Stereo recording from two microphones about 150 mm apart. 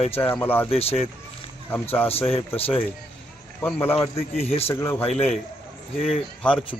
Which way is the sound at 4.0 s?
40° left (ahead or behind).